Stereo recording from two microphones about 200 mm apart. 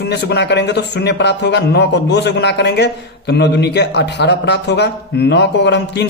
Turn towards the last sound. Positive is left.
turn(degrees=60)  # may be behind; listen again after turning